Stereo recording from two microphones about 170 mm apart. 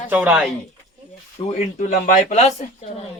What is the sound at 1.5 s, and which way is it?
Speech, 45° left (ahead or behind).